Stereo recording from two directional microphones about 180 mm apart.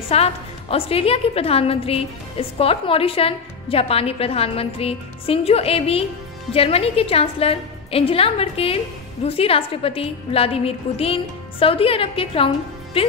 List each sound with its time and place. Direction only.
0.1 s a woman's voice: 35° left (ahead or behind)